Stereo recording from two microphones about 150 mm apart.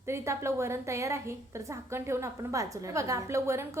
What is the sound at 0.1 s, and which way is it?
A woman's voice, 20° right (ahead or behind).